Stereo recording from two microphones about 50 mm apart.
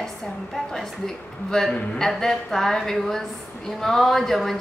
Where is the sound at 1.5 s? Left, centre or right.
Centre.